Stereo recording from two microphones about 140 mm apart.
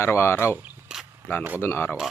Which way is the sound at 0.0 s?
15° left (ahead or behind).